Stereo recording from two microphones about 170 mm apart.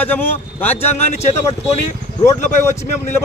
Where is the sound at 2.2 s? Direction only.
15° left (ahead or behind).